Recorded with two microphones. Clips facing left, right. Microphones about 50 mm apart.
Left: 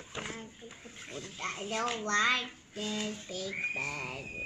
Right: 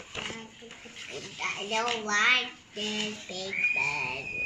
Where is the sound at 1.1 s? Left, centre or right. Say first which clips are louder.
Right 4 dB; right.